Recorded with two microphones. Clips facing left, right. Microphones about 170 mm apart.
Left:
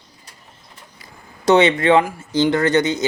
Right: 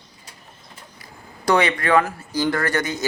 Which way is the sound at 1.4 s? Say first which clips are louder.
Left 6 dB; 25° left (ahead or behind).